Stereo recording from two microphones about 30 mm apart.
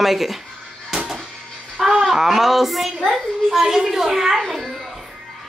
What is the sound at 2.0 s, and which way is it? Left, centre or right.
Speech, centre.